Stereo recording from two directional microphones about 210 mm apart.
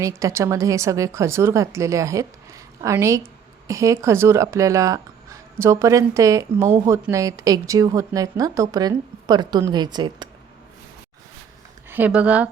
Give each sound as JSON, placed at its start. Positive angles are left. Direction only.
{"t": 0.0, "sound": "a woman's voice", "side_deg": -15}
{"t": 11.9, "sound": "speech", "side_deg": -10}